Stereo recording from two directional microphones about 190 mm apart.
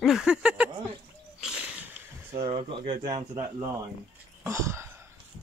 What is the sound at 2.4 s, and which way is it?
Speech, 30° right (ahead or behind).